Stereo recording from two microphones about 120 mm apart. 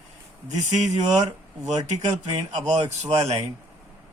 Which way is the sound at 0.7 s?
75° right (ahead or behind).